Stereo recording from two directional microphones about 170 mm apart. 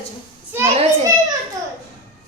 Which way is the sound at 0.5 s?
10° right (ahead or behind).